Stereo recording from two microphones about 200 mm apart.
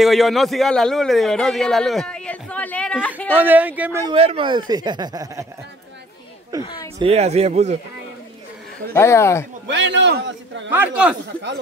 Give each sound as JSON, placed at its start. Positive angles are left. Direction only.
{"t": 0.0, "sound": "a man's voice", "side_deg": 0}
{"t": 3.3, "sound": "speech", "side_deg": -10}
{"t": 4.1, "sound": "speech", "side_deg": -25}
{"t": 6.6, "sound": "speech", "side_deg": 20}
{"t": 7.0, "sound": "a man's voice", "side_deg": -30}
{"t": 8.9, "sound": "speech", "side_deg": 15}
{"t": 9.7, "sound": "a man's voice", "side_deg": -60}
{"t": 10.7, "sound": "speech", "side_deg": -10}